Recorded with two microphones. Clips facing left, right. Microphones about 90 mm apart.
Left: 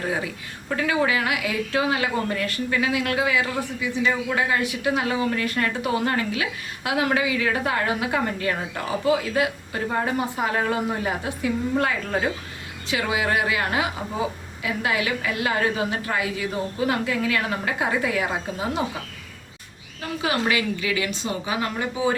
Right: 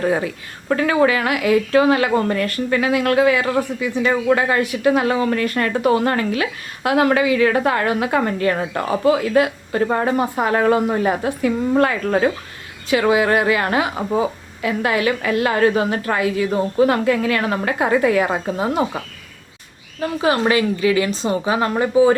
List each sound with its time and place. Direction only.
0.8 s a woman's voice: 55° right (ahead or behind)
20.0 s a woman's voice: 40° right (ahead or behind)